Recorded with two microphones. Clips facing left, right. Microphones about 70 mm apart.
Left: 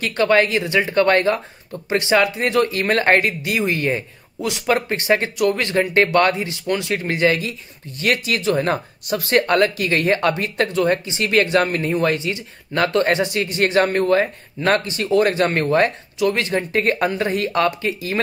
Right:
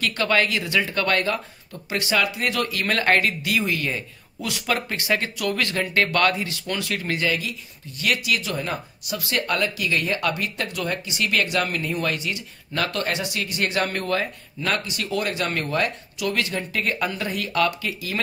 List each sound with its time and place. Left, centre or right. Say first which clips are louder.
0.0 s speech: left 5 dB; left
16.2 s speech: left 6 dB; left